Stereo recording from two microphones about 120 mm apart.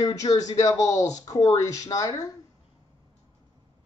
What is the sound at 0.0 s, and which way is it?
Speech, 30° left (ahead or behind).